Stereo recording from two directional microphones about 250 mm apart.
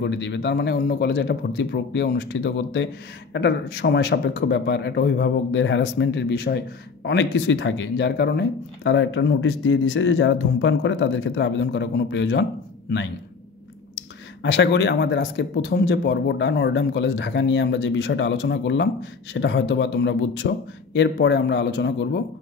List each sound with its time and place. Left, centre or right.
0.0 s speech: left
13.9 s speech: left